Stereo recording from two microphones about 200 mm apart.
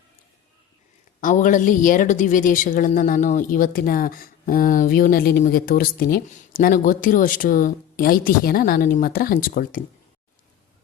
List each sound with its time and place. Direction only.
1.2 s a woman's voice: 40° left (ahead or behind)